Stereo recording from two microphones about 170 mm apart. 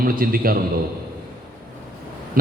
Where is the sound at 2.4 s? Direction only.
60° right (ahead or behind).